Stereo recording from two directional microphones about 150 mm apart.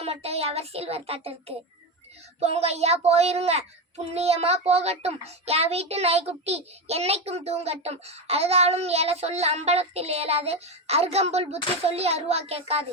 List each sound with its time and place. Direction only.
0.0 s a child's voice: 45° right (ahead or behind)